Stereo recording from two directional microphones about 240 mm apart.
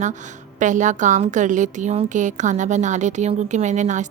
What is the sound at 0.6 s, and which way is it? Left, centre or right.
A woman's voice, right.